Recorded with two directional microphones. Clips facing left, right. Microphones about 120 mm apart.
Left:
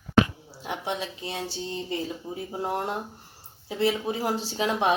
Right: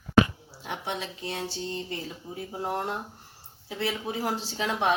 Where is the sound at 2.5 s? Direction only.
20° left (ahead or behind).